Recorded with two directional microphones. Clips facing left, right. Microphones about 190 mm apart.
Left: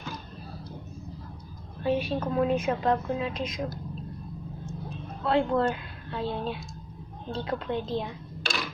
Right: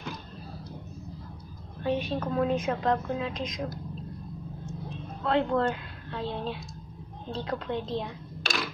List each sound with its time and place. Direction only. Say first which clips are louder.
1.8 s a woman's voice: left 2 dB; 5° left (ahead or behind)
5.2 s a woman's voice: left 1 dB; 10° left (ahead or behind)